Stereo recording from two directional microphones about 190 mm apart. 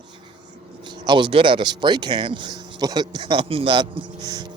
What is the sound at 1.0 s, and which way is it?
Speech, 25° right (ahead or behind).